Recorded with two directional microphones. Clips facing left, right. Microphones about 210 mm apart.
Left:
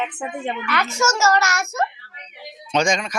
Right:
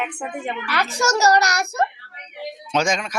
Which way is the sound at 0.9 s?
35° right (ahead or behind).